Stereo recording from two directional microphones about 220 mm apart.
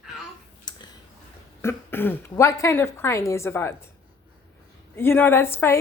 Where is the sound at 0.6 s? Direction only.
20° left (ahead or behind).